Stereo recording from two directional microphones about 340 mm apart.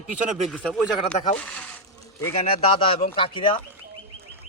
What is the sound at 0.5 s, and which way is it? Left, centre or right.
Speech, centre.